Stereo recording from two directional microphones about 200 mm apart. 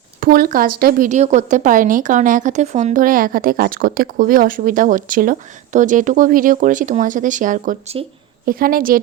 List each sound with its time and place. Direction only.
0.2 s a woman's voice: 45° right (ahead or behind)